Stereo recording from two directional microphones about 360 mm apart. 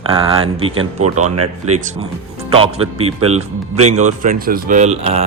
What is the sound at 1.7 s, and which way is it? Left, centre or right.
Speech, centre.